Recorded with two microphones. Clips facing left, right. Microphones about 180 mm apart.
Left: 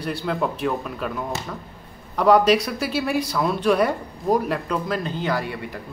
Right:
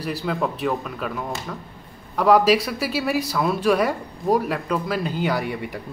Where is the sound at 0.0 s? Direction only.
Centre (ahead or behind).